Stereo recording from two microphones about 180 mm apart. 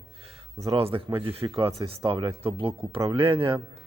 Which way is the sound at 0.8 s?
30° right (ahead or behind).